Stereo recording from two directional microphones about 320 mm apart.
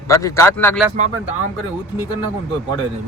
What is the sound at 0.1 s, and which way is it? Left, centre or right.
Speech, centre.